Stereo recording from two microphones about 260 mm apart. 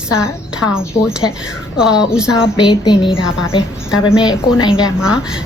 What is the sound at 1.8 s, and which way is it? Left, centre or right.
Speech, centre.